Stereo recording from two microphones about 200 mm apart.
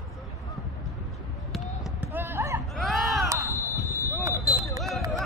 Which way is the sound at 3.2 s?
15° right (ahead or behind).